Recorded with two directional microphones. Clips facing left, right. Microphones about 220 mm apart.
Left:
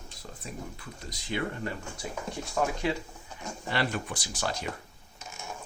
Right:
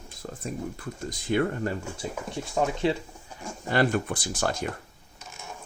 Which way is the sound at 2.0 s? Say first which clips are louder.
Right 1 dB; 25° right (ahead or behind).